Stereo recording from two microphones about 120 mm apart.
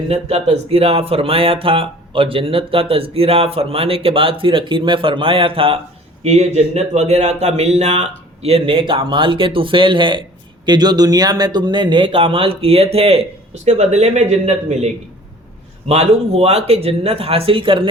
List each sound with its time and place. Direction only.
0.1 s speech: 60° right (ahead or behind)
6.2 s speech: 65° right (ahead or behind)
15.9 s speech: 60° right (ahead or behind)